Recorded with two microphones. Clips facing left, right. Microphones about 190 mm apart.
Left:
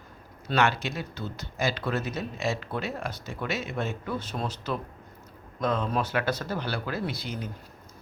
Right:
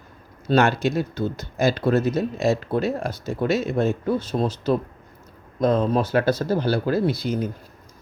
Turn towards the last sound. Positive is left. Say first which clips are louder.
# right 10 dB
turn(degrees=-45)  # may be behind; listen again after turning